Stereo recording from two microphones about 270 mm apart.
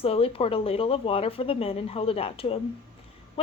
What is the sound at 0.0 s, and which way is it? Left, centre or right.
Speech, left.